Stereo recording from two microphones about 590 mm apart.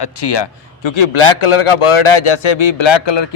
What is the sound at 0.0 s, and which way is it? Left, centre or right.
A man's voice, left.